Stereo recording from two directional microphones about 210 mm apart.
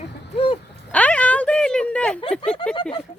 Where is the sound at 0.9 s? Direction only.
5° left (ahead or behind).